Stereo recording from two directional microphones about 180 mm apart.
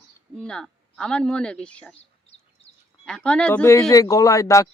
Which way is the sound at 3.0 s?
5° left (ahead or behind).